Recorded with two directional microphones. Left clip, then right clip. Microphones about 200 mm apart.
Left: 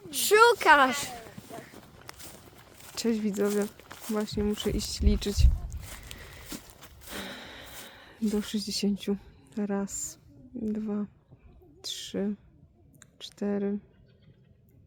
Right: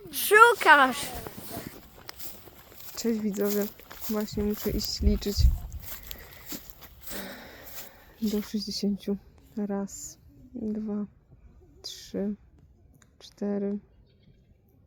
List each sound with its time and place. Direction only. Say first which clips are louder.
0.1 s speech: right 3 dB; centre (ahead or behind)
2.0 s walk: right 1 dB; 25° right (ahead or behind)
2.9 s speech: even; centre (ahead or behind)
3.7 s a sound: even; 30° right (ahead or behind)
4.1 s a woman's voice: even; centre (ahead or behind)
5.8 s a sound: even; 30° right (ahead or behind)
7.1 s gasp: left 1 dB; 5° right (ahead or behind)
8.4 s a woman's voice: left 1 dB; centre (ahead or behind)
13.0 s a sound: even; centre (ahead or behind)